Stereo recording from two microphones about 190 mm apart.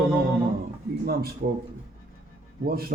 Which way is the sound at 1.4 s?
50° right (ahead or behind).